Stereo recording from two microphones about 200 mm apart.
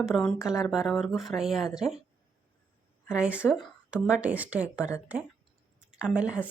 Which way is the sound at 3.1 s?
5° right (ahead or behind).